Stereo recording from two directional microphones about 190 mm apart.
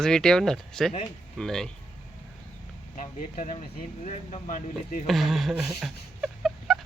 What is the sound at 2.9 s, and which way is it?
Speech, 40° left (ahead or behind).